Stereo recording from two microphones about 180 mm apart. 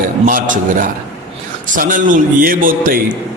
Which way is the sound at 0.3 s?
50° right (ahead or behind).